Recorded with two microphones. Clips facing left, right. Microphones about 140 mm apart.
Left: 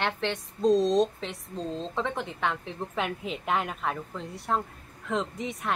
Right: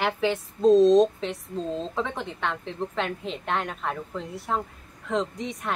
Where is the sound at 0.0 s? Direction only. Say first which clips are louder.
Right 4 dB; 5° right (ahead or behind).